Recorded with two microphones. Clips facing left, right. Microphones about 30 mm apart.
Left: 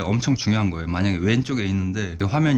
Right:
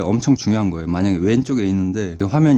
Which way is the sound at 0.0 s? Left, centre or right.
Centre.